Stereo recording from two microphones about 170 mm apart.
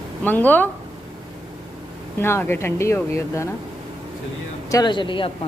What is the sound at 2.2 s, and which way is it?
Speech, 15° left (ahead or behind).